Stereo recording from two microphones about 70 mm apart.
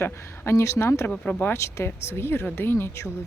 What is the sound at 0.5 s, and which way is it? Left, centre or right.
Speech, left.